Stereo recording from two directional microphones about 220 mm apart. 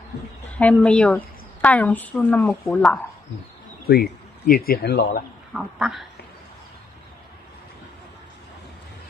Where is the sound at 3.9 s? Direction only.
45° left (ahead or behind).